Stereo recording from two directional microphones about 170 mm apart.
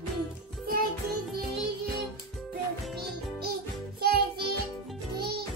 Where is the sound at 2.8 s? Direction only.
Centre (ahead or behind).